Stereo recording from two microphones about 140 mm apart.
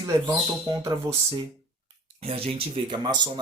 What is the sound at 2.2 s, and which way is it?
Speech, 45° right (ahead or behind).